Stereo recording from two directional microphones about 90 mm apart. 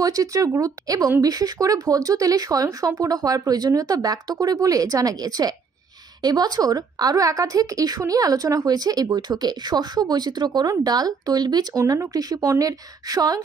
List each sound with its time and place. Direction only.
0.0 s speech: 40° right (ahead or behind)
11.8 s speech: 35° right (ahead or behind)